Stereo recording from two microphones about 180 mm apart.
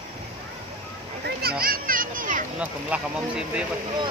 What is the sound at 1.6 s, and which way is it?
Children playing, 55° right (ahead or behind).